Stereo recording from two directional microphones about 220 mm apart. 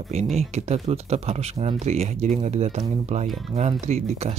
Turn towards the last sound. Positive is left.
turn(degrees=-30)  # may be behind; listen again after turning